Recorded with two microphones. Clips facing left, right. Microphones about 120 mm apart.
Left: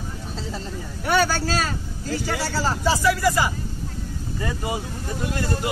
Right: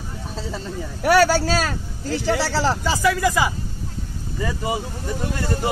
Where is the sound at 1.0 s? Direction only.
90° right.